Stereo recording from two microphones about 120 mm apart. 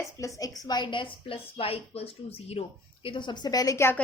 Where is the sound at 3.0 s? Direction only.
40° left (ahead or behind); by 4.0 s 25° left (ahead or behind).